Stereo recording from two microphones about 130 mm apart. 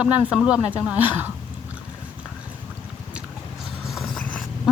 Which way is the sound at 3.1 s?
5° right (ahead or behind).